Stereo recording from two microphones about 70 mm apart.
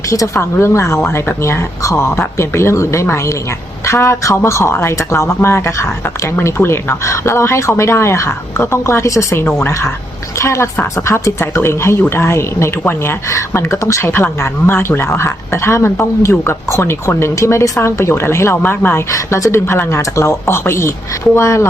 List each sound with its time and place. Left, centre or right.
0.3 s speech: left
18.6 s speech: left
19.1 s speech: left